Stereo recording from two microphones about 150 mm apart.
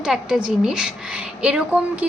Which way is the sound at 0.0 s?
5° right (ahead or behind).